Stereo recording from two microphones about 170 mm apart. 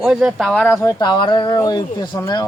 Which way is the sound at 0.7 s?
20° left (ahead or behind).